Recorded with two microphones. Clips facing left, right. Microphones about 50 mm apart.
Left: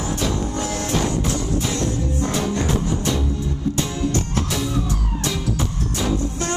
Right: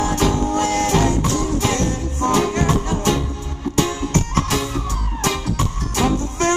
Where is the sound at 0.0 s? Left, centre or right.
Right.